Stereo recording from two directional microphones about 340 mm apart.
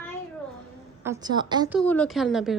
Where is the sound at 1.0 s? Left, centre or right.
Centre.